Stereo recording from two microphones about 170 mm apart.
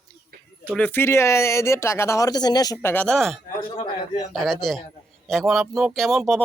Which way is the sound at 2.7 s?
10° left (ahead or behind).